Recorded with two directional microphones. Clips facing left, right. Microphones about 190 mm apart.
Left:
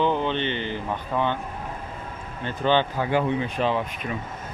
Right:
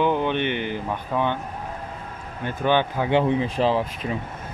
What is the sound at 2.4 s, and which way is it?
Speech, 10° right (ahead or behind).